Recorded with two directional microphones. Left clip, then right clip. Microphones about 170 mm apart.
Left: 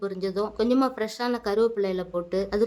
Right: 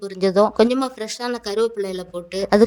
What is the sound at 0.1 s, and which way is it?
A woman's voice, 45° right (ahead or behind).